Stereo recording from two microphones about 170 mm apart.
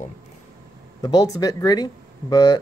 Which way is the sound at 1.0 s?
20° left (ahead or behind).